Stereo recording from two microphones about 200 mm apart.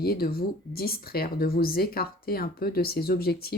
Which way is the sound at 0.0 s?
50° left (ahead or behind).